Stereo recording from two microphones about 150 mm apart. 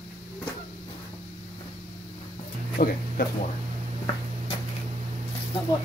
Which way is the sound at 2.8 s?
70° left (ahead or behind).